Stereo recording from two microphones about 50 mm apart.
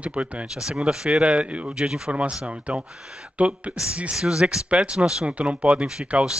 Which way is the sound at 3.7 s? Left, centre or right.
Centre.